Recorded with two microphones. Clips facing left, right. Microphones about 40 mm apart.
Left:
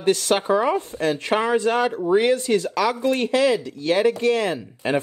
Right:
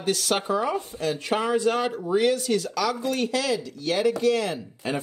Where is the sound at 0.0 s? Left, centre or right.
Left.